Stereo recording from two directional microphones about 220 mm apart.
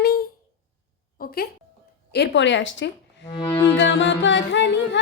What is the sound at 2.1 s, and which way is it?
Music, 50° left (ahead or behind).